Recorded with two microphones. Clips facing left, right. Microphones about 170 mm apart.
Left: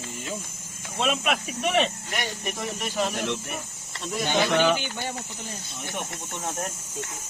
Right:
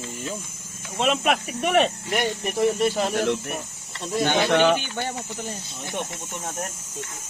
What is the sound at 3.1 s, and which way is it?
Speech, 55° right (ahead or behind).